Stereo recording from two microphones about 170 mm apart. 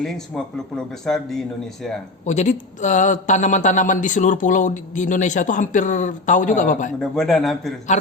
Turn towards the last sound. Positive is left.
turn(degrees=0)  # may be behind; listen again after turning